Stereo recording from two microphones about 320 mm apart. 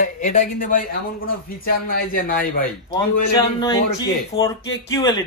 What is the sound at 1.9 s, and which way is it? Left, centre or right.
Speech, left.